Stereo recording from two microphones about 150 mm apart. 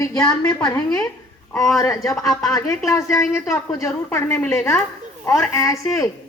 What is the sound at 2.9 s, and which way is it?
A woman's voice, 15° left (ahead or behind).